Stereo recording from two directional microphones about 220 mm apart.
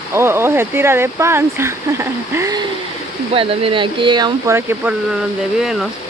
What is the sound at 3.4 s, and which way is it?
Speech, 25° right (ahead or behind).